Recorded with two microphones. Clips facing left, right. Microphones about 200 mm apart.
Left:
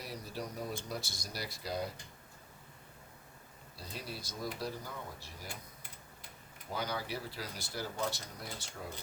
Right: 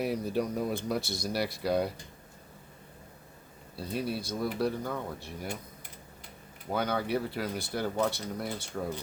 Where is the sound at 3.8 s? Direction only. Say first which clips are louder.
Right 12 dB; 60° right (ahead or behind).